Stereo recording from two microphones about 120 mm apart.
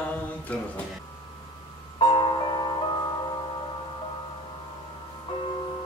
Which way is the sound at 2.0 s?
35° left (ahead or behind).